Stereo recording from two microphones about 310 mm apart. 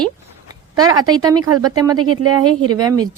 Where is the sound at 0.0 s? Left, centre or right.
Centre.